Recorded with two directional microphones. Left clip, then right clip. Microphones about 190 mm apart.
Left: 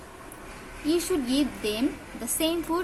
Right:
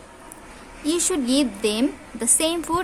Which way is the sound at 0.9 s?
50° right (ahead or behind).